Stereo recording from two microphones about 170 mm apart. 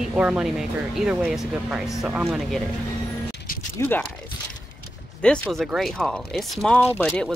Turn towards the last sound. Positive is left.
turn(degrees=-10)  # may be behind; listen again after turning